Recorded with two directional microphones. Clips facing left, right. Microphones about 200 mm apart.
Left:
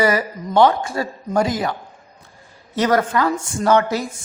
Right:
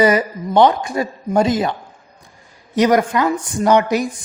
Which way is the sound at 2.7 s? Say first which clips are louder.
Right 3 dB; 15° right (ahead or behind).